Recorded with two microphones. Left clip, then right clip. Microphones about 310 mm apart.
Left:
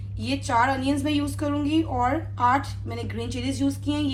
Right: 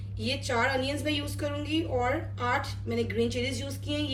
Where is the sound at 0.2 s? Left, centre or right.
Centre.